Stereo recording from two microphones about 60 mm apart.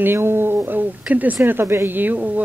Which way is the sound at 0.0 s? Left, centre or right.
Right.